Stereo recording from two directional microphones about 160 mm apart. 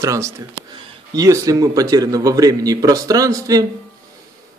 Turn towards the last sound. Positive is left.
turn(degrees=-20)  # may be behind; listen again after turning